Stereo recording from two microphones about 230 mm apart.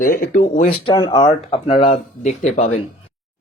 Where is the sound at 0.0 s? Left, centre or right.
Left.